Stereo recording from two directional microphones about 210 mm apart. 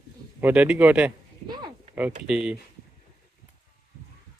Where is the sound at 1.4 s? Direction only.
20° right (ahead or behind).